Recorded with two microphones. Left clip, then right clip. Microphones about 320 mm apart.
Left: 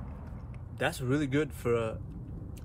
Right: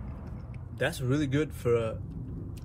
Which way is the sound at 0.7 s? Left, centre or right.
Centre.